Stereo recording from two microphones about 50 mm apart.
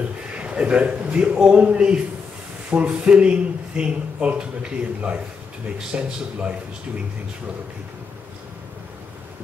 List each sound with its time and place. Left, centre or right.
0.4 s a man's voice: right